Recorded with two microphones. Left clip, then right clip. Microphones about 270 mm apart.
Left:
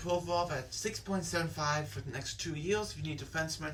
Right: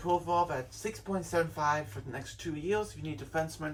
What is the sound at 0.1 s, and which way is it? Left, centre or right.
Speech, centre.